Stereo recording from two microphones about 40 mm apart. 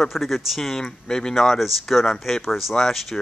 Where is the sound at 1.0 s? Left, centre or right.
Centre.